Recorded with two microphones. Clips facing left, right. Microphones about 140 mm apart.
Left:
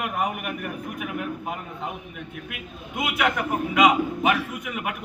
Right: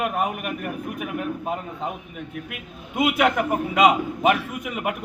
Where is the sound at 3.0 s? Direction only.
30° right (ahead or behind).